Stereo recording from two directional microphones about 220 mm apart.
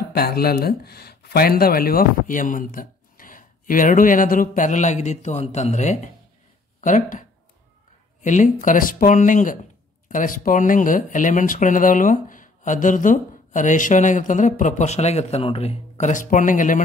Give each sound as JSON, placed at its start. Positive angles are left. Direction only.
{"t": 0.1, "sound": "speech", "side_deg": 45}